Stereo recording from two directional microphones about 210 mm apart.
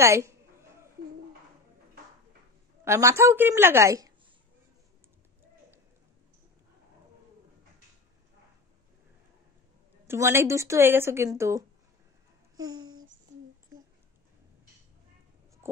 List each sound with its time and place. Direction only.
0.0 s a sound: 15° right (ahead or behind)
2.8 s speech: 15° right (ahead or behind)
10.0 s speech: 10° right (ahead or behind)
12.5 s babbling: 20° right (ahead or behind)
15.6 s heart sounds: 10° right (ahead or behind)